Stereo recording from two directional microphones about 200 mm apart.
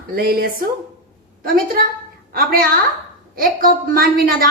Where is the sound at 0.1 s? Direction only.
50° right (ahead or behind).